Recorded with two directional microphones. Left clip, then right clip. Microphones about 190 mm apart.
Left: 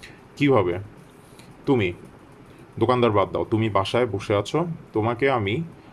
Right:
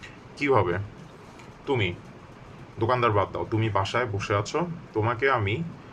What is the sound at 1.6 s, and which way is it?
Speech, 35° left (ahead or behind).